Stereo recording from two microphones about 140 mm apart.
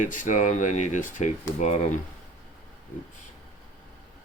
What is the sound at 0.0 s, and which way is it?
Speech, 65° left (ahead or behind).